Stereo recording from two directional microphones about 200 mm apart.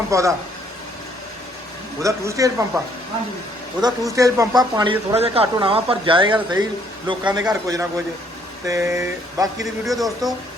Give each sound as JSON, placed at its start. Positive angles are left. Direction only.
{"t": 0.1, "sound": "speech", "side_deg": -15}
{"t": 2.0, "sound": "speech", "side_deg": -15}
{"t": 3.8, "sound": "speech", "side_deg": -20}
{"t": 9.8, "sound": "speech", "side_deg": 0}